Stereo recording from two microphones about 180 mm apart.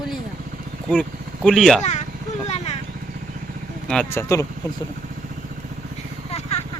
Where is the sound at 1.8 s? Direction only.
40° left (ahead or behind).